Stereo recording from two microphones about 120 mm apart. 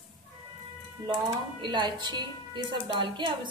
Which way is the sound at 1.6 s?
40° right (ahead or behind).